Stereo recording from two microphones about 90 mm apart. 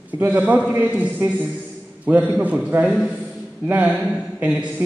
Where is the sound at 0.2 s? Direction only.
20° right (ahead or behind).